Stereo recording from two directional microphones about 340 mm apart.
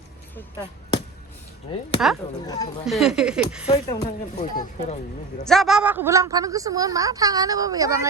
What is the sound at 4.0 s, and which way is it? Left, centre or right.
Speech, left.